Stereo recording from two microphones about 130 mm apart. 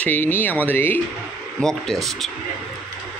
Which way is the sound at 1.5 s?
5° left (ahead or behind).